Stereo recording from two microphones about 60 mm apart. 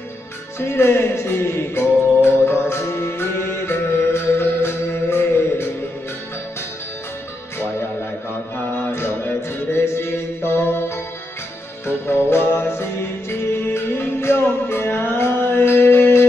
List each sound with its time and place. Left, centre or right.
0.6 s music: left
8.9 s music: left